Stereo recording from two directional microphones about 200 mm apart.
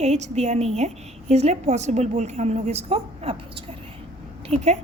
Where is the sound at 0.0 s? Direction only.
35° right (ahead or behind).